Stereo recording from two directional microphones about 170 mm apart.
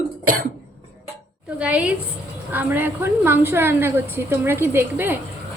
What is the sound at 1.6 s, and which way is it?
A woman's voice, 5° right (ahead or behind).